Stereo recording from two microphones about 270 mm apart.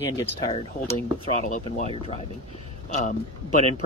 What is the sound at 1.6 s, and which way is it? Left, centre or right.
Speech, left.